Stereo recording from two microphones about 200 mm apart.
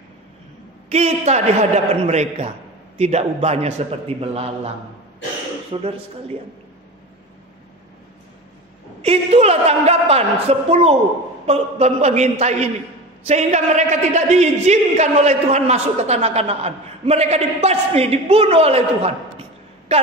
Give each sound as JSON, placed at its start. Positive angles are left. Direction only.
{"t": 0.8, "sound": "a man's voice", "side_deg": -30}
{"t": 5.7, "sound": "speech", "side_deg": -30}
{"t": 9.0, "sound": "a man's voice", "side_deg": -30}